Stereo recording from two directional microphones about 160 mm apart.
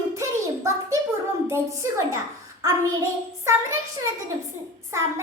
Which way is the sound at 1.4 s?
15° right (ahead or behind).